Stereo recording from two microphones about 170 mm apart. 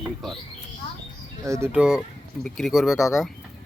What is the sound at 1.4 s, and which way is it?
Speech, 15° right (ahead or behind).